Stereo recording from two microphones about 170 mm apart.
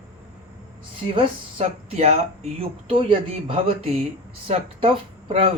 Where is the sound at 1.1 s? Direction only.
30° right (ahead or behind).